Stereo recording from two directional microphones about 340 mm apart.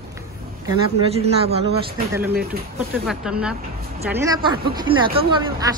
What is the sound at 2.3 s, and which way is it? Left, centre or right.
Speech, right.